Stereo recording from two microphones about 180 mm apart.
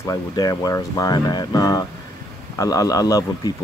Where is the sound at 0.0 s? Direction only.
20° left (ahead or behind).